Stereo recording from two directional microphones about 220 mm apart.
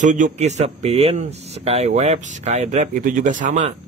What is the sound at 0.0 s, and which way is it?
Speech, 35° right (ahead or behind).